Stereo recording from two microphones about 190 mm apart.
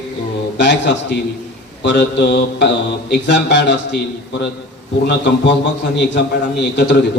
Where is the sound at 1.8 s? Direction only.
65° left (ahead or behind).